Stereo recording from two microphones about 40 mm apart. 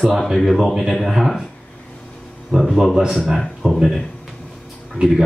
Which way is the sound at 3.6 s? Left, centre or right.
Centre.